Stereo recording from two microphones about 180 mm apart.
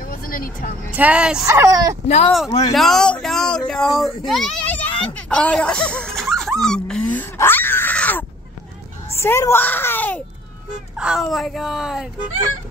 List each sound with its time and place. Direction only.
0.0 s speech: 50° left (ahead or behind)
0.9 s speech: 5° right (ahead or behind)
1.4 s speech: 15° right (ahead or behind)
2.0 s speech: 35° left (ahead or behind)
2.7 s a child's voice: centre (ahead or behind)
6.6 s a sound: 5° left (ahead or behind)
9.1 s a child's voice: 15° left (ahead or behind)
11.0 s speech: 5° right (ahead or behind)